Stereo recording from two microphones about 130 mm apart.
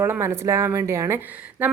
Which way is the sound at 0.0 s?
20° right (ahead or behind).